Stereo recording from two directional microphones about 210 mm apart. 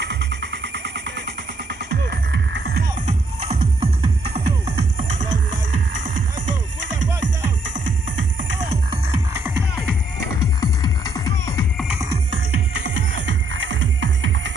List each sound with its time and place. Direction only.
0.0 s music: 55° right (ahead or behind)
1.9 s music: 55° right (ahead or behind)
3.3 s music: 30° right (ahead or behind)
10.6 s music: 15° left (ahead or behind)
12.8 s music: 60° right (ahead or behind)